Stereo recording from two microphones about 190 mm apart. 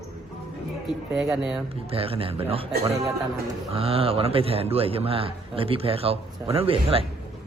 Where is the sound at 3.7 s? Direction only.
30° right (ahead or behind).